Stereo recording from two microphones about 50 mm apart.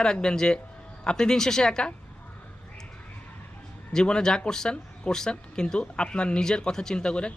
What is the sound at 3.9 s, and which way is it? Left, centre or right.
Speech, centre.